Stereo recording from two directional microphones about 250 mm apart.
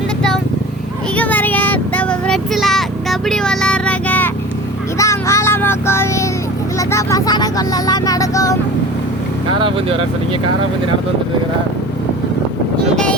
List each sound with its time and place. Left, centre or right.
1.1 s a sound: centre
4.9 s child singing: centre
6.7 s speech: centre
9.6 s speech: right